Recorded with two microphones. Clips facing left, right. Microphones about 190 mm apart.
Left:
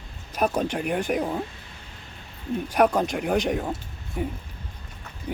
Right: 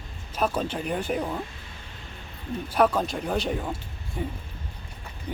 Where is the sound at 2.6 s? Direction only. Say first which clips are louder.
Left 2 dB; 15° left (ahead or behind).